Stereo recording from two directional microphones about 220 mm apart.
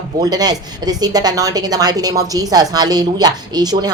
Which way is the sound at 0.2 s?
20° right (ahead or behind).